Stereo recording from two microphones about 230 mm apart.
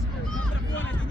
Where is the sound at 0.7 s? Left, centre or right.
Left.